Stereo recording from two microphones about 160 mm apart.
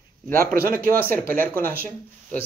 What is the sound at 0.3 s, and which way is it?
Speech, 60° right (ahead or behind).